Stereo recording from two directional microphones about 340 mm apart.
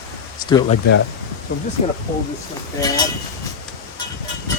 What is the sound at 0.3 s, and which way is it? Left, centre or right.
Speech, centre.